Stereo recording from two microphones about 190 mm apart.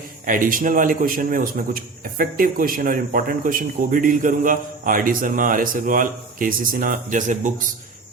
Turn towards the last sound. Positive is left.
turn(degrees=-40)  # may be behind; listen again after turning